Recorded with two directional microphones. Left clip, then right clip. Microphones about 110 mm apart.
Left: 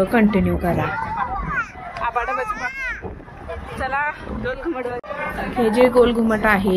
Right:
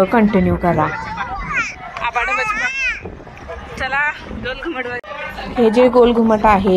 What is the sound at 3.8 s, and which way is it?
Speech, 80° left.